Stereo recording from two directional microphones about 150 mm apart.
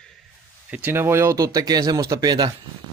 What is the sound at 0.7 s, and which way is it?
Speech, 15° right (ahead or behind).